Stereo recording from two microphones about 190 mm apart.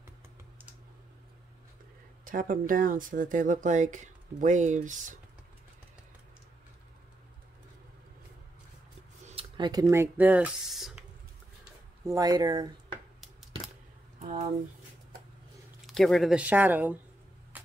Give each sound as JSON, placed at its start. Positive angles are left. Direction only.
{"t": 2.2, "sound": "speech", "side_deg": -45}
{"t": 9.2, "sound": "speech", "side_deg": -30}
{"t": 12.0, "sound": "speech", "side_deg": -15}
{"t": 14.2, "sound": "speech", "side_deg": -45}
{"t": 15.9, "sound": "speech", "side_deg": 0}
{"t": 17.5, "sound": "a sound", "side_deg": -10}